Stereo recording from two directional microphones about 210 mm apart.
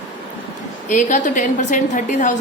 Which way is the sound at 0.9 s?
35° left (ahead or behind).